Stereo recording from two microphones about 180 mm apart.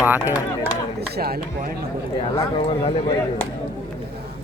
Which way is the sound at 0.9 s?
60° right (ahead or behind).